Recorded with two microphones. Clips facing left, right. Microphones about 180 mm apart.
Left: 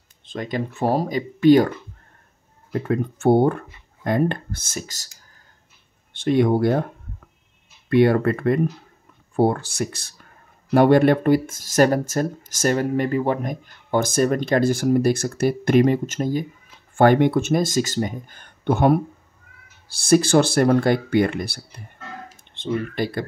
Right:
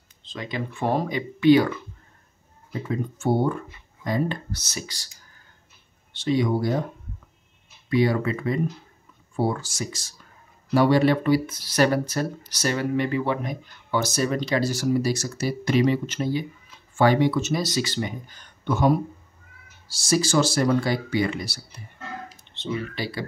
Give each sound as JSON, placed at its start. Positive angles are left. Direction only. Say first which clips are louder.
{"t": 0.2, "sound": "speech", "louder": "left 5 dB", "side_deg": 50}
{"t": 2.7, "sound": "speech", "louder": "left 6 dB", "side_deg": 60}
{"t": 6.1, "sound": "speech", "louder": "left 5 dB", "side_deg": 55}
{"t": 7.9, "sound": "speech", "louder": "left 5 dB", "side_deg": 60}